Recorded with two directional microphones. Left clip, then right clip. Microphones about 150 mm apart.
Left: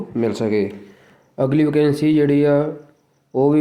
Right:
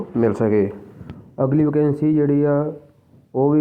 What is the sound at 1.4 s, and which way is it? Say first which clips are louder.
Speech: left 2 dB; 30° left (ahead or behind).